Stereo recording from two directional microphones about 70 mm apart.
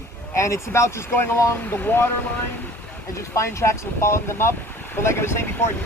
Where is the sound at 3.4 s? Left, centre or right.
Left.